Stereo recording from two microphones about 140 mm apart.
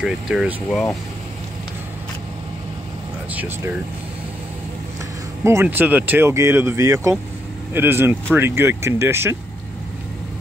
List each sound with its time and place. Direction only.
0.0 s speech: 5° right (ahead or behind)
3.3 s speech: 15° right (ahead or behind)
5.4 s speech: 15° right (ahead or behind)